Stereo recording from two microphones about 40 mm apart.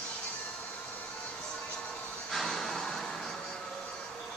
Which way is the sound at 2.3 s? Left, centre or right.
Centre.